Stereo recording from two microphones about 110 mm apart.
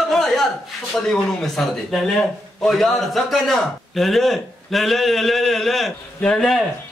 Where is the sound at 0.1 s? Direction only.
Centre (ahead or behind).